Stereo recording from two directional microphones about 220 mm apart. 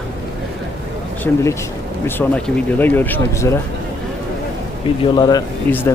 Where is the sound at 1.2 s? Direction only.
15° left (ahead or behind).